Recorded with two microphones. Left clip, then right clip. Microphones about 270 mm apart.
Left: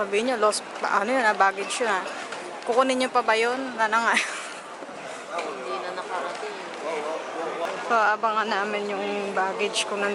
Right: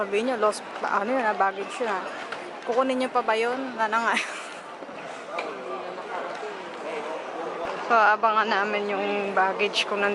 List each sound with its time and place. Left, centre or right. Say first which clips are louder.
0.1 s speech: left 1 dB; centre
0.4 s speech: left 2 dB; centre
7.9 s speech: right 3 dB; centre